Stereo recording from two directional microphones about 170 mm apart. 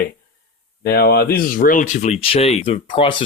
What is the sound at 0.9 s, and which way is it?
Speech, 70° left (ahead or behind).